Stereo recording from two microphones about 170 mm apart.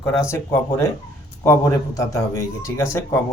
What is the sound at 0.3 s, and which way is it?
A man's voice, 15° left (ahead or behind).